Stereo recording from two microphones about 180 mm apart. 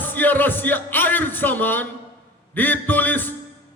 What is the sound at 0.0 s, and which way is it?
Music, 10° left (ahead or behind).